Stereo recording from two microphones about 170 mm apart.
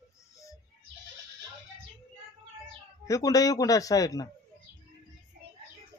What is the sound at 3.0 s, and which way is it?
Speech, 20° left (ahead or behind).